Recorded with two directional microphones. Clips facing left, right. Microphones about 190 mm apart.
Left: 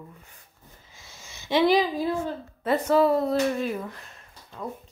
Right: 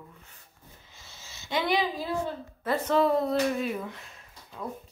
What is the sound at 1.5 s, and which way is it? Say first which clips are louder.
Speech: left 7 dB; 35° left (ahead or behind).